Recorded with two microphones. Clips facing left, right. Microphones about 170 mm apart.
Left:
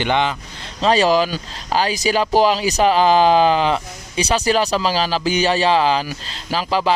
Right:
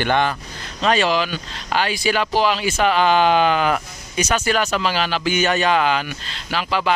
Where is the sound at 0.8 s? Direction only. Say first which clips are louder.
Left 3 dB; 35° left (ahead or behind).